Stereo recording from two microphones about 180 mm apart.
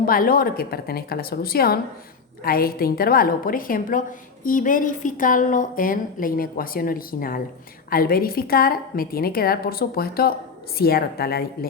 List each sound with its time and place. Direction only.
0.0 s a woman's voice: 50° left (ahead or behind)